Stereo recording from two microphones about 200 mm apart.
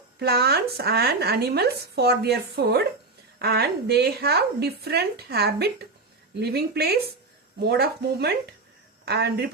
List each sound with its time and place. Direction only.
0.2 s a woman's voice: 50° right (ahead or behind)